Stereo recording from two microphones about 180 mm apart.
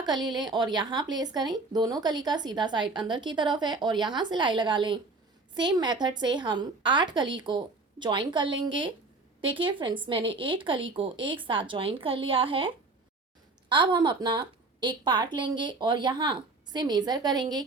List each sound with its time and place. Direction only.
0.0 s a woman's voice: 25° right (ahead or behind)